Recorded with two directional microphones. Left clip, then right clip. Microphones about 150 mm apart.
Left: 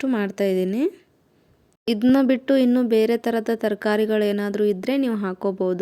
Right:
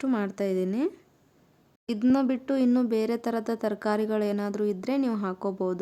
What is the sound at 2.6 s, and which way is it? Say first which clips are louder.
Speech: left 7 dB; 15° left (ahead or behind).